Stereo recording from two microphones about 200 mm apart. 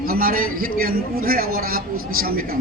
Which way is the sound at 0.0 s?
45° right (ahead or behind).